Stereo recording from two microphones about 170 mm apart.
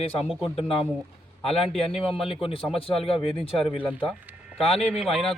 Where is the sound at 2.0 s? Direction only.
35° left (ahead or behind).